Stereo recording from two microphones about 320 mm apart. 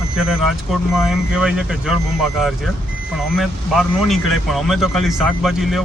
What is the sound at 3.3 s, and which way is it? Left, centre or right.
Speech, centre.